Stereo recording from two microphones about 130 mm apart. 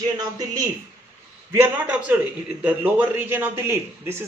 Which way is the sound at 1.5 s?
15° right (ahead or behind).